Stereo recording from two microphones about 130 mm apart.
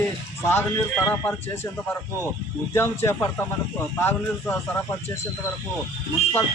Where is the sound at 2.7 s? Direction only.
20° left (ahead or behind).